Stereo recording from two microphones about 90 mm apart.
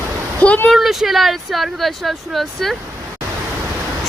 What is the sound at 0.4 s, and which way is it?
Speech, 15° left (ahead or behind).